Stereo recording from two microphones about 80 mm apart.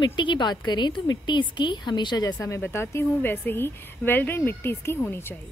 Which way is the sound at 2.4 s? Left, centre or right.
Left.